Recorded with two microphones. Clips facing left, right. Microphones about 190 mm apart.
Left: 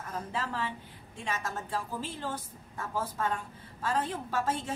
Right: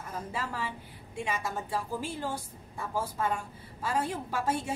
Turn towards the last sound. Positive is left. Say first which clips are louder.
# right 1 dB
turn(degrees=-10)  # may be behind; listen again after turning